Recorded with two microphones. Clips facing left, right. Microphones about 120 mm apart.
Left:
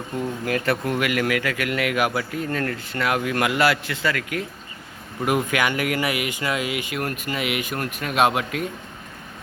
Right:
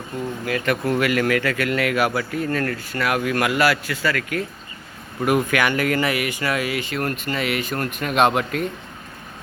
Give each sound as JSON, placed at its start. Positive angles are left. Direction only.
{"t": 0.4, "sound": "speech", "side_deg": 35}
{"t": 0.9, "sound": "speech", "side_deg": 15}